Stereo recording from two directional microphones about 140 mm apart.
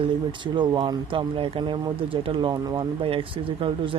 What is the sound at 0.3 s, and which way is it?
Speech, 35° right (ahead or behind).